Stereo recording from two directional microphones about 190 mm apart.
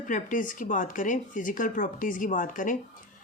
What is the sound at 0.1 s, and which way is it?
Speech, 45° left (ahead or behind).